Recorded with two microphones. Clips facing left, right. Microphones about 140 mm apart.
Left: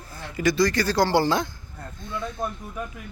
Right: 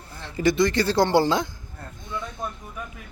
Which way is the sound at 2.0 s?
15° right (ahead or behind).